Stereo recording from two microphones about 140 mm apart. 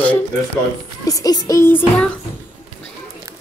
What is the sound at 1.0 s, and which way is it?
Speech, 25° left (ahead or behind).